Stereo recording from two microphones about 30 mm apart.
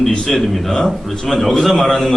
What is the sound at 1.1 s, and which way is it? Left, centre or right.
Speech, centre.